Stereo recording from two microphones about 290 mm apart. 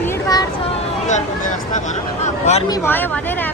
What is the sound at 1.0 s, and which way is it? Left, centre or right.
Speech, left.